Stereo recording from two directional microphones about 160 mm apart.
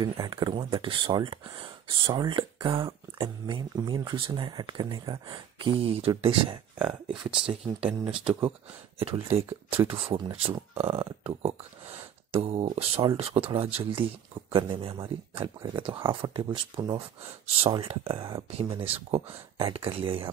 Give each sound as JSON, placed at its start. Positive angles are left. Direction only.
{"t": 0.0, "sound": "speech", "side_deg": -30}
{"t": 6.8, "sound": "speech", "side_deg": -5}
{"t": 7.6, "sound": "speech", "side_deg": -35}